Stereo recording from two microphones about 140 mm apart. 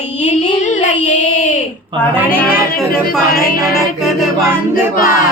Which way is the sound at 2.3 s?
5° left (ahead or behind).